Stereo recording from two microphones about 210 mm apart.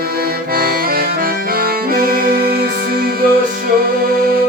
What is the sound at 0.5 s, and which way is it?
Accordion, 45° right (ahead or behind).